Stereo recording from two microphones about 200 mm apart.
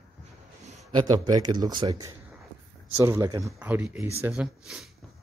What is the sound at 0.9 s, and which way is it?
Speech, 20° right (ahead or behind).